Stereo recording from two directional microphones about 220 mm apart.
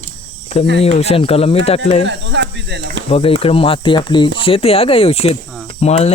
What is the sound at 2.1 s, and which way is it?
Speech, 55° right (ahead or behind).